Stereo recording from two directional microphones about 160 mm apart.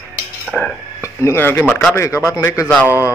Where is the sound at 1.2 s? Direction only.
15° left (ahead or behind).